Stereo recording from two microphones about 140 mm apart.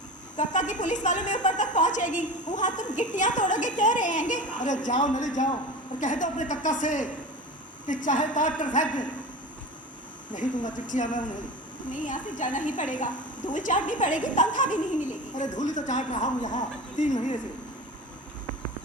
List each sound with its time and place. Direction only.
0.3 s a woman's voice: 60° left (ahead or behind)
10.3 s a woman's voice: 65° left (ahead or behind)